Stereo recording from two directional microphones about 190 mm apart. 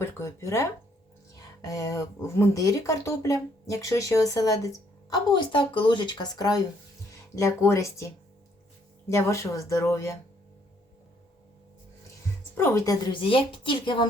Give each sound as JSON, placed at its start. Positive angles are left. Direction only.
{"t": 0.0, "sound": "a woman's voice", "side_deg": 15}
{"t": 12.5, "sound": "a woman's voice", "side_deg": 15}